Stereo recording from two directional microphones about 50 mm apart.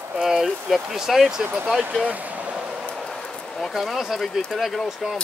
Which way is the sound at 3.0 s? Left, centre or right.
Centre.